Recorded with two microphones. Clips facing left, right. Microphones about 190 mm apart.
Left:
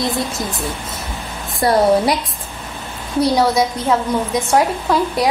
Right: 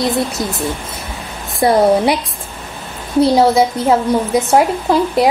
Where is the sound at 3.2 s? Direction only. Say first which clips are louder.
Right 4 dB; 25° right (ahead or behind).